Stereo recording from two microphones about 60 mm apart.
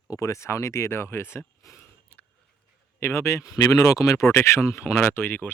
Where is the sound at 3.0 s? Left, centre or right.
Left.